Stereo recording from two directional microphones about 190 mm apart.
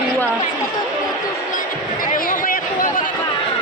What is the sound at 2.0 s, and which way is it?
Chatter, 45° left (ahead or behind).